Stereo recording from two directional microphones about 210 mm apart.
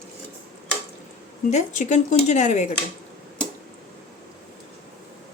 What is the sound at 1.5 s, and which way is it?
Speech, 35° left (ahead or behind).